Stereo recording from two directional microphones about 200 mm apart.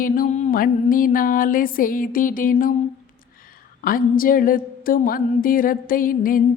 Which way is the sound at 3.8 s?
45° left (ahead or behind).